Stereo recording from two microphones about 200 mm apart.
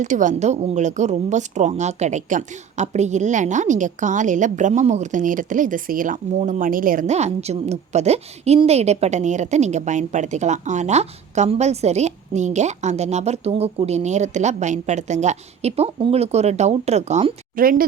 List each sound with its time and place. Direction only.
0.0 s a woman's voice: 40° right (ahead or behind)